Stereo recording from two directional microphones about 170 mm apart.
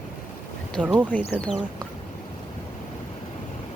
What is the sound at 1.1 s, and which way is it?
Speech, 10° left (ahead or behind).